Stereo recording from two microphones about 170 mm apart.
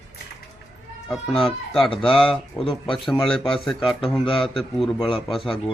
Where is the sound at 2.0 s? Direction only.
30° left (ahead or behind).